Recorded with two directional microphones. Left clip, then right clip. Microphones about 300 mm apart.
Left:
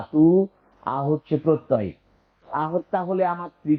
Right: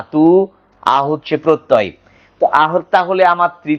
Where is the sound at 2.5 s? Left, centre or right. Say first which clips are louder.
Right 10 dB; centre.